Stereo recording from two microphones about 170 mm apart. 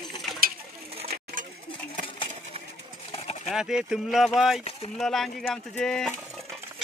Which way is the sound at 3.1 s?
35° left (ahead or behind).